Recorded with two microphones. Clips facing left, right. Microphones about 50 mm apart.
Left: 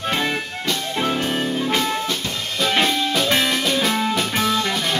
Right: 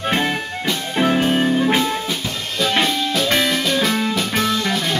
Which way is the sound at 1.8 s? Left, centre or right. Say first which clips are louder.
Right 1 dB; centre.